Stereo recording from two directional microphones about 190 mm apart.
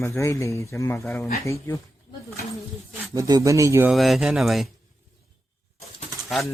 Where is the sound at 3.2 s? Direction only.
20° right (ahead or behind).